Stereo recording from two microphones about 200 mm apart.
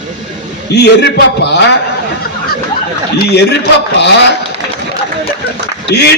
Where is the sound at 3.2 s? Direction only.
55° left (ahead or behind).